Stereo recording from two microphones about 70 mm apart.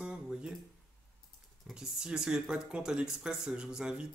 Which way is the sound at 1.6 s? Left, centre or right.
Centre.